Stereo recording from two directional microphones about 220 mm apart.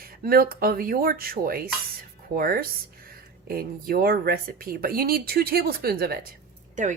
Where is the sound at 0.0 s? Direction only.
40° right (ahead or behind).